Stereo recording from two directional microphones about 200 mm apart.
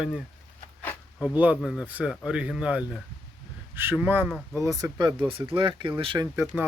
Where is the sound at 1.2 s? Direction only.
5° right (ahead or behind).